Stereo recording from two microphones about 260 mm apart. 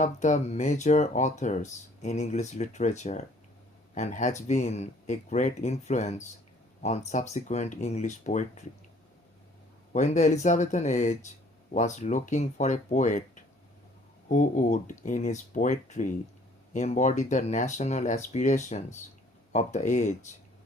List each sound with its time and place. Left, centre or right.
0.0 s speech: left
9.9 s speech: left